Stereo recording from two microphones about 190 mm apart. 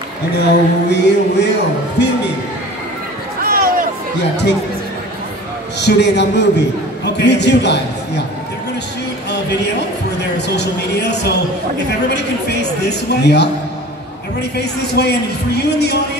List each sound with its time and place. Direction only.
0.4 s a woman's voice: 65° left (ahead or behind)
3.4 s a sound: 50° right (ahead or behind)
5.8 s a woman's voice: 65° left (ahead or behind)
10.3 s a man's voice: 60° left (ahead or behind)
14.6 s a woman's voice: 60° left (ahead or behind)